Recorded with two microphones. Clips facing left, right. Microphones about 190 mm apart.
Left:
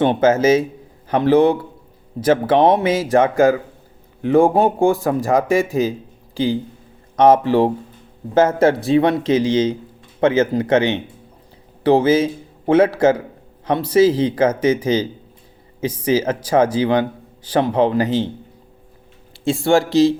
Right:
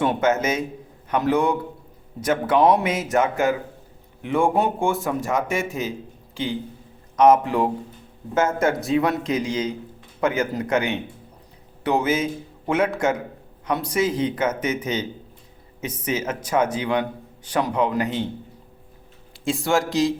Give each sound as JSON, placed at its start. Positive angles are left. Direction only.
{"t": 0.0, "sound": "a man's voice", "side_deg": 30}
{"t": 16.0, "sound": "a man's voice", "side_deg": 30}